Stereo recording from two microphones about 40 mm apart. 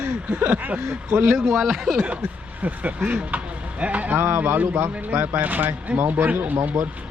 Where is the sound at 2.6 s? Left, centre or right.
Right.